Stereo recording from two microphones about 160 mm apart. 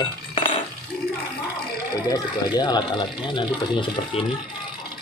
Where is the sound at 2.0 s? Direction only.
25° left (ahead or behind).